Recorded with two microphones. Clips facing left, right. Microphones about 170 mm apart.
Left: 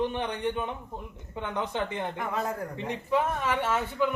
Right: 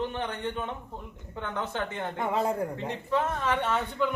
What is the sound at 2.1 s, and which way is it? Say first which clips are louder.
Speech: right 8 dB; 25° right (ahead or behind).